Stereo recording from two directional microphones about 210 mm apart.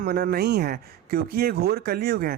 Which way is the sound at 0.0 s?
45° right (ahead or behind).